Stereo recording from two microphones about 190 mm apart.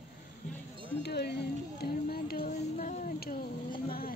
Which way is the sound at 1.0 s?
60° left (ahead or behind).